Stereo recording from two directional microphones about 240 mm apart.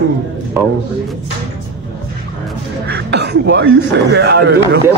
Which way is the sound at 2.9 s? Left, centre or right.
Right.